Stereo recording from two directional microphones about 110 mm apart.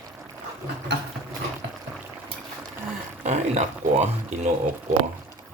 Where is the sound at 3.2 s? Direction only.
90° right.